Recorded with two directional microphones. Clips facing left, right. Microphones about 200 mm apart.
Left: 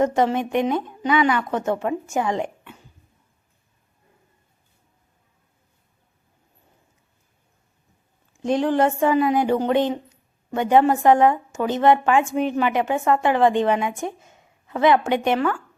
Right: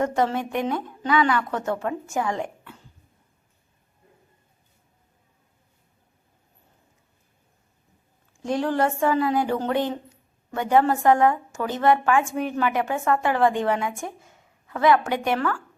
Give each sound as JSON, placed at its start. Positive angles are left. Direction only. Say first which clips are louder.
{"t": 0.0, "sound": "a woman's voice", "louder": "left 4 dB", "side_deg": 20}
{"t": 8.4, "sound": "a woman's voice", "louder": "left 4 dB", "side_deg": 20}